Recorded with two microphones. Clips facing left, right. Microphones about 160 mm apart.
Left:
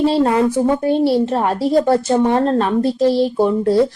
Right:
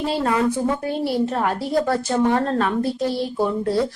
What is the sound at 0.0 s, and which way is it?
A woman's voice, 30° left (ahead or behind).